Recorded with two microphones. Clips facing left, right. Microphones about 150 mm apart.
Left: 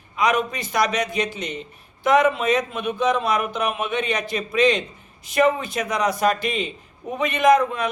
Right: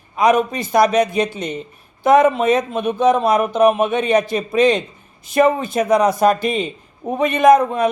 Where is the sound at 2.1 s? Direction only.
45° right (ahead or behind).